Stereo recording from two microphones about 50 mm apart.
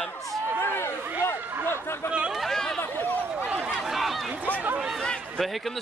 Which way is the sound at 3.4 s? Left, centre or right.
Right.